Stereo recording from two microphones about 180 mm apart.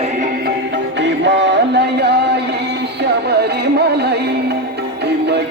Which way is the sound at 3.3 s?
65° right (ahead or behind).